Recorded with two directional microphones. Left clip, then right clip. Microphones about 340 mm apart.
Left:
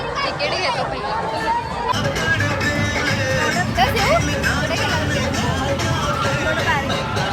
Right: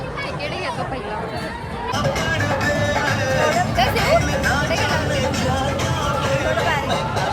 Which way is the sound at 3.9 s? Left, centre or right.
Centre.